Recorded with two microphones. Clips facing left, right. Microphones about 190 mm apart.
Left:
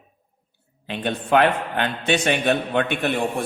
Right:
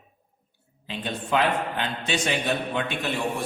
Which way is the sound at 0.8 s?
60° left (ahead or behind).